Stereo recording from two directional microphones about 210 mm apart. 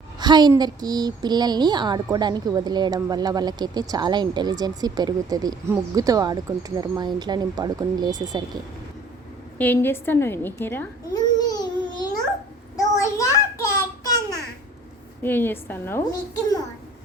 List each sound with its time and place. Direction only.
0.2 s a woman's voice: 20° right (ahead or behind)
9.6 s speech: 10° left (ahead or behind)
12.7 s child singing: 15° left (ahead or behind)
14.0 s a sound: 15° left (ahead or behind)
15.2 s a child's voice: 10° left (ahead or behind)